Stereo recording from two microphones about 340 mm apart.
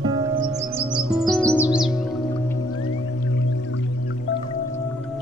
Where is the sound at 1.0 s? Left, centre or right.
Centre.